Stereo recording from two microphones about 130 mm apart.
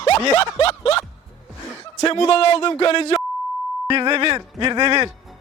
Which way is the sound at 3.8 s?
40° right (ahead or behind).